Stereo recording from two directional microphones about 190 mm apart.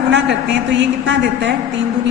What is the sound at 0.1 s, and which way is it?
A woman's voice, 65° right (ahead or behind).